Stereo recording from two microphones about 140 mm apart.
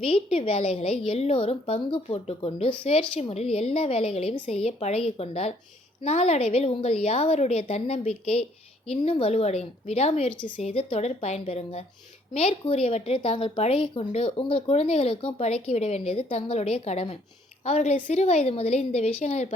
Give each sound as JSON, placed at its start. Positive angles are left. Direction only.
{"t": 0.0, "sound": "a woman's voice", "side_deg": 45}